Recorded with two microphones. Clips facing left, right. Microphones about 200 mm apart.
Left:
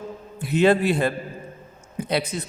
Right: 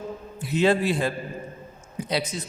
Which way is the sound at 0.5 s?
60° left (ahead or behind).